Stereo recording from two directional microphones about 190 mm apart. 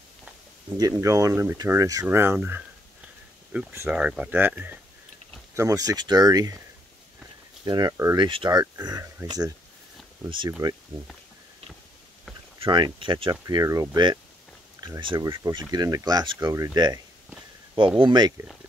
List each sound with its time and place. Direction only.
0.7 s speech: 20° right (ahead or behind)
7.6 s speech: 20° right (ahead or behind)
10.6 s speech: 20° right (ahead or behind)
12.6 s speech: 25° right (ahead or behind)